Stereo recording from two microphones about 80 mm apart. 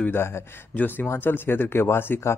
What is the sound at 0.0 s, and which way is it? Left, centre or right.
A man's voice, left.